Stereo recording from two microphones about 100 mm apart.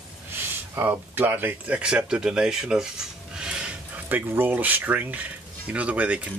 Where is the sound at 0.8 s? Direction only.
20° right (ahead or behind).